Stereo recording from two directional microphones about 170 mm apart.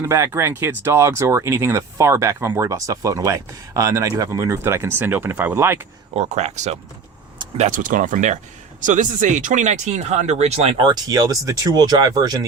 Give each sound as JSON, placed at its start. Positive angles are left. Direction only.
{"t": 0.0, "sound": "speech", "side_deg": -15}
{"t": 6.1, "sound": "speech", "side_deg": -40}